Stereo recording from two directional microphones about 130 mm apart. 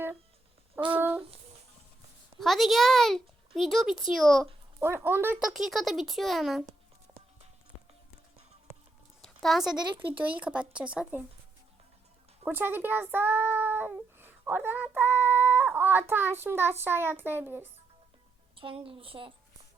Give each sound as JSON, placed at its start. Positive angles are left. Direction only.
{"t": 0.9, "sound": "child singing", "side_deg": -15}
{"t": 2.4, "sound": "speech", "side_deg": 0}
{"t": 4.8, "sound": "speech", "side_deg": -15}
{"t": 5.4, "sound": "speech", "side_deg": 0}
{"t": 9.2, "sound": "a sound", "side_deg": 0}
{"t": 9.7, "sound": "speech", "side_deg": -35}
{"t": 10.1, "sound": "speech", "side_deg": -10}
{"t": 12.5, "sound": "speech", "side_deg": -15}
{"t": 18.5, "sound": "a woman's voice", "side_deg": -45}